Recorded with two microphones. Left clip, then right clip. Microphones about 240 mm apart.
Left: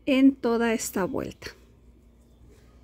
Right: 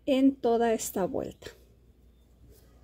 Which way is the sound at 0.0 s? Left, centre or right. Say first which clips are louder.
Left 3 dB; centre.